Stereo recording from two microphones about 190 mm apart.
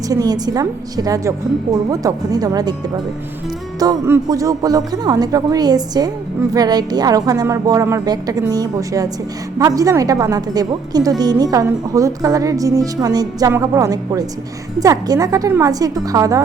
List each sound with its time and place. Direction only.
0.1 s speech: 20° right (ahead or behind)
3.8 s a woman's voice: 15° right (ahead or behind)